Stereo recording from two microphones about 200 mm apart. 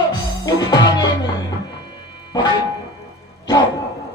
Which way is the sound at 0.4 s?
20° left (ahead or behind).